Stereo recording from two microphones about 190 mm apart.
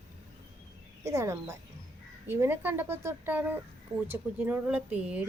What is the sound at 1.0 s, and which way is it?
Speech, 15° right (ahead or behind).